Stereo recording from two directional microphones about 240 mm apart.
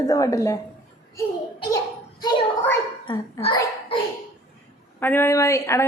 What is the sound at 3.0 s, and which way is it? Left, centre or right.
Speech, left.